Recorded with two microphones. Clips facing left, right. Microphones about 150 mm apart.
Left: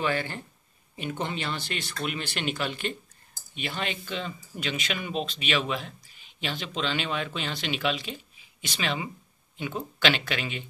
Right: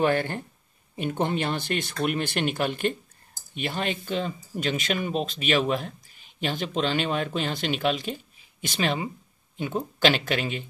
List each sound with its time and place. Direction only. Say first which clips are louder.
0.0 s speech: right 5 dB; 50° right (ahead or behind)